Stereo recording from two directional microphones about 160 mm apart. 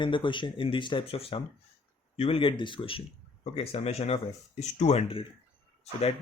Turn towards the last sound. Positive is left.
turn(degrees=40)  # may be behind; listen again after turning